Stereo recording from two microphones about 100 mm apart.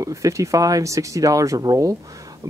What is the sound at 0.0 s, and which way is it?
Speech, 30° right (ahead or behind).